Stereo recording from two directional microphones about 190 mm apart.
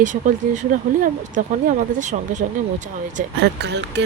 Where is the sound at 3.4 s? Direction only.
65° right (ahead or behind).